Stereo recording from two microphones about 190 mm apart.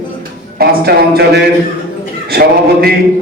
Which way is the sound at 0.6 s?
55° right (ahead or behind).